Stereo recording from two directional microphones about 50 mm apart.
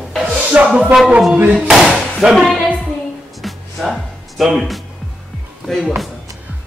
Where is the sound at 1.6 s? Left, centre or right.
Centre.